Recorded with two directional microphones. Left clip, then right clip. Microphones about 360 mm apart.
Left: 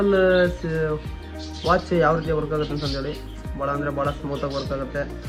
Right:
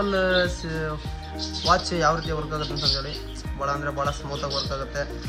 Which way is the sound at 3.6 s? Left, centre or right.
Left.